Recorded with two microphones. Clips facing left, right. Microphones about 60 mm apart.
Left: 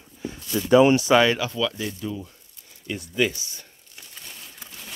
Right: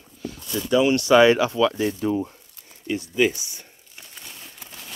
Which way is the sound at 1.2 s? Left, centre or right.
Right.